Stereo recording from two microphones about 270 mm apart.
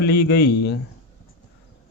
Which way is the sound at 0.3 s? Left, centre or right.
Left.